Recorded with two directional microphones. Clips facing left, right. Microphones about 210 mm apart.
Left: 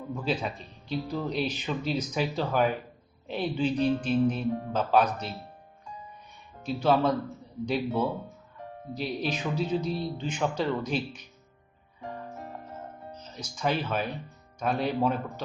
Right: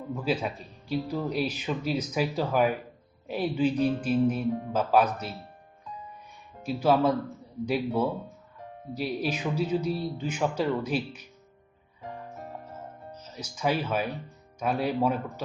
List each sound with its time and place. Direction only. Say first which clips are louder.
0.1 s speech: right 2 dB; 5° right (ahead or behind)
6.6 s speech: right 1 dB; 5° right (ahead or behind)
13.1 s speech: right 1 dB; 10° right (ahead or behind)